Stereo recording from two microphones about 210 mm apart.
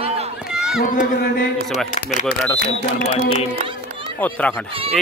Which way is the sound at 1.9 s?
35° left (ahead or behind).